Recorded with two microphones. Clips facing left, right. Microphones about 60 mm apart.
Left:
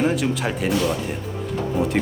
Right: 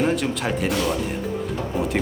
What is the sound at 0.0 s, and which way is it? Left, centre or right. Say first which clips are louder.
Speech: left 1 dB; centre.